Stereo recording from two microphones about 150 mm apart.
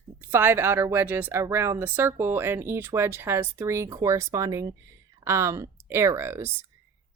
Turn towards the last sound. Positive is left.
turn(degrees=-15)  # may be behind; listen again after turning